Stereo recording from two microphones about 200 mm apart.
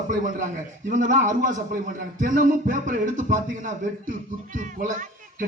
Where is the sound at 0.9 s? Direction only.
40° right (ahead or behind).